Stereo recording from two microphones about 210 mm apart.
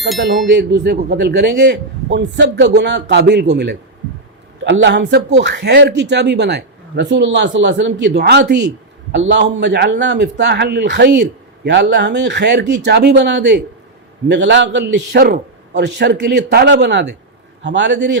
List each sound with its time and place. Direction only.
0.4 s a man's voice: 55° right (ahead or behind)